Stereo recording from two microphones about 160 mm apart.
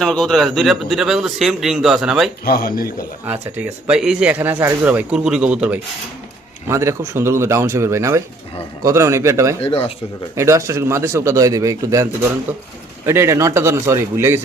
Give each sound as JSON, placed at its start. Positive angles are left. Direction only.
{"t": 0.0, "sound": "speech", "side_deg": 0}
{"t": 2.4, "sound": "speech", "side_deg": 70}
{"t": 3.2, "sound": "speech", "side_deg": -10}
{"t": 9.6, "sound": "speech", "side_deg": 35}
{"t": 10.3, "sound": "speech", "side_deg": -20}
{"t": 13.1, "sound": "speech", "side_deg": -15}